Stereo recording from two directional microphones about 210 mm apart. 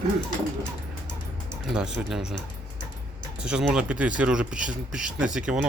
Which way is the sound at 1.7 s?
5° right (ahead or behind).